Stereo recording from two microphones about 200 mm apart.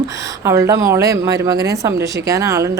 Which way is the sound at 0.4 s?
15° right (ahead or behind).